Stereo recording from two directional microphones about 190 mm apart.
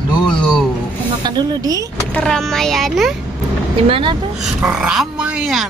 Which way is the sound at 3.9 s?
25° right (ahead or behind).